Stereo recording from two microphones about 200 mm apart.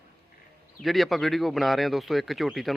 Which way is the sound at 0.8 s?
Centre (ahead or behind).